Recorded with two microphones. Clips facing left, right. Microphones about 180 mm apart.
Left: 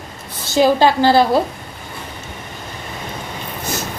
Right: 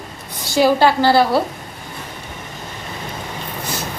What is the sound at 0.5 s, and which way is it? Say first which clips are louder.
Speech: left 1 dB; 20° left (ahead or behind).